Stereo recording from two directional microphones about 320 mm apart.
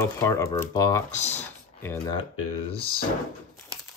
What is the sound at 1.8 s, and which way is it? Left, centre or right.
Speech, centre.